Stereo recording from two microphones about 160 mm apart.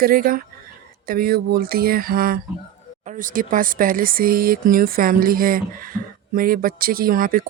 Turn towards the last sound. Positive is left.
turn(degrees=-65)  # may be behind; listen again after turning